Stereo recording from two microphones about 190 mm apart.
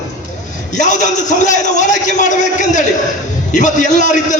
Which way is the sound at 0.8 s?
40° left (ahead or behind).